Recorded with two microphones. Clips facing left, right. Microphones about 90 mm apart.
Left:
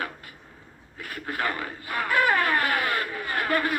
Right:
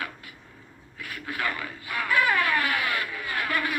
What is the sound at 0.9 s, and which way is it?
Speech, 40° left (ahead or behind).